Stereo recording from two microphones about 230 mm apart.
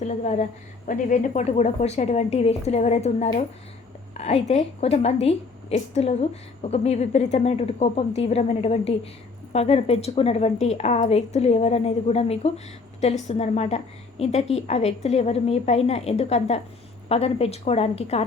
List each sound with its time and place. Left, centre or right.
0.0 s a woman's voice: left